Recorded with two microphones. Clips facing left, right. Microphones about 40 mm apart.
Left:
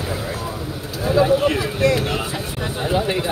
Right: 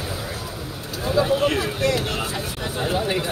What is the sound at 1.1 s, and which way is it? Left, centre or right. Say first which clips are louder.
Speech: left 3 dB; centre.